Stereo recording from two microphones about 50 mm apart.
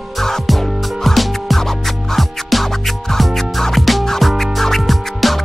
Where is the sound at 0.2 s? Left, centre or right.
Centre.